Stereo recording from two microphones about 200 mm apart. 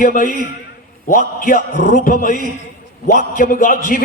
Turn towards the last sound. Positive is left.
turn(degrees=45)  # may be behind; listen again after turning